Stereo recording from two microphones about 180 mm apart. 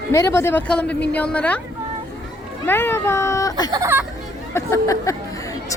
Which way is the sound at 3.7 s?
20° right (ahead or behind).